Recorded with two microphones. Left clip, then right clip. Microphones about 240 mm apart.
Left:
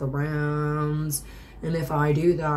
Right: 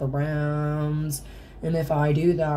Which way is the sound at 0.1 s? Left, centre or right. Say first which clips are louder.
Even; centre.